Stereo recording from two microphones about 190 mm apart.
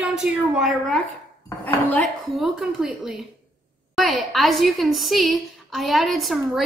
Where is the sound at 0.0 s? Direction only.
5° right (ahead or behind).